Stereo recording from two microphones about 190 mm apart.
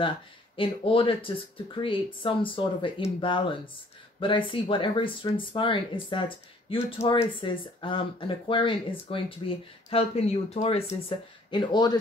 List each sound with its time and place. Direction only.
0.6 s speech: 30° left (ahead or behind)